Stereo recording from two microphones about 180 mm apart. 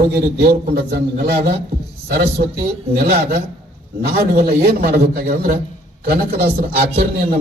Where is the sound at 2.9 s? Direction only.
60° right (ahead or behind).